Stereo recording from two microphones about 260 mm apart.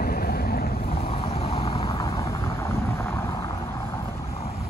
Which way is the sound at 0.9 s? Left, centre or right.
Left.